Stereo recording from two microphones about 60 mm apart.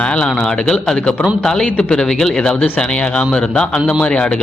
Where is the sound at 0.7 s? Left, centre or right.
Centre.